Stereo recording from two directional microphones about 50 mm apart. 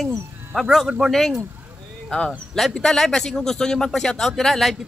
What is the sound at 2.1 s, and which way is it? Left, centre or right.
A man's voice, centre.